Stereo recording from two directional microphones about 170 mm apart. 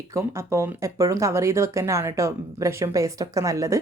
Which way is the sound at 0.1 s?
15° right (ahead or behind).